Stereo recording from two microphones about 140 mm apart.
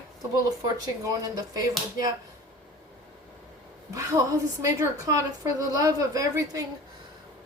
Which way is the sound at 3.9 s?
25° right (ahead or behind).